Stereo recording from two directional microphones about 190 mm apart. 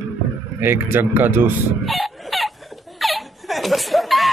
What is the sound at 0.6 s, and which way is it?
Speech, 10° right (ahead or behind).